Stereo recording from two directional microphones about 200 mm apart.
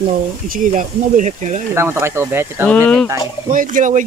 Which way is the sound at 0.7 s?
40° right (ahead or behind).